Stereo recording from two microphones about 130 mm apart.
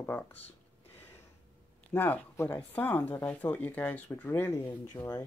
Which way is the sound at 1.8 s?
15° left (ahead or behind).